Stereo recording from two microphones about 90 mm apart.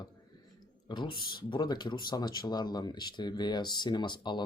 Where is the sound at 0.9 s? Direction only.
60° left (ahead or behind).